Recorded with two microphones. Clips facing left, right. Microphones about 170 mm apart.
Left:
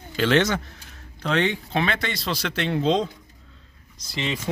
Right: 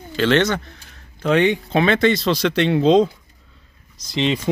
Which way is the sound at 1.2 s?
15° right (ahead or behind).